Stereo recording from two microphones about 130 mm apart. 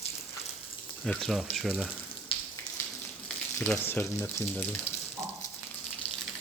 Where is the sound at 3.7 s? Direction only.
15° left (ahead or behind).